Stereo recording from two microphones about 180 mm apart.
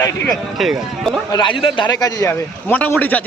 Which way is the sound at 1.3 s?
25° left (ahead or behind).